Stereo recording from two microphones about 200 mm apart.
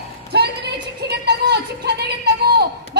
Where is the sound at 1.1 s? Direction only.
55° right (ahead or behind).